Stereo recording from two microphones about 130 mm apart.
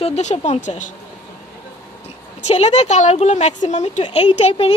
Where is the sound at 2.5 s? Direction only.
55° left (ahead or behind).